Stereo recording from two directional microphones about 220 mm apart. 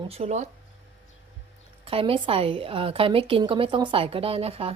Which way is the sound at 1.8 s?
25° right (ahead or behind).